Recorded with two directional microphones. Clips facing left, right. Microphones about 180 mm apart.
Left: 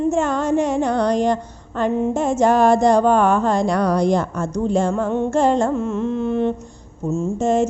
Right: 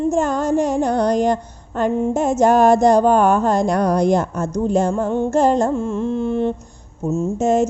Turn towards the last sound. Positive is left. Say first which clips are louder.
# right 1 dB
turn(degrees=-45)  # may be behind; listen again after turning